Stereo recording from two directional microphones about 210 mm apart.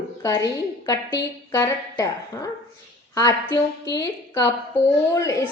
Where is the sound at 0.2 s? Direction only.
15° left (ahead or behind).